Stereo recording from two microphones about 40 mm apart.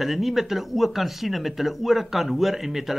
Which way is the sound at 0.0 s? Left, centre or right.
Centre.